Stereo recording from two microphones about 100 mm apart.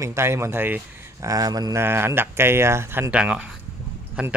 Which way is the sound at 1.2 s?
40° right (ahead or behind).